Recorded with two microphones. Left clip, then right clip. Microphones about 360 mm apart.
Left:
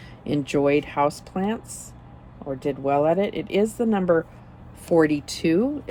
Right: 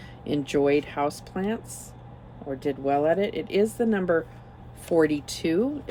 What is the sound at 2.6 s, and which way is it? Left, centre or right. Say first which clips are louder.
Speech: left 3 dB; centre.